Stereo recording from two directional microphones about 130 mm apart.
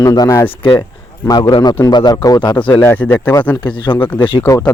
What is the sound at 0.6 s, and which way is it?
Speech, 35° left (ahead or behind).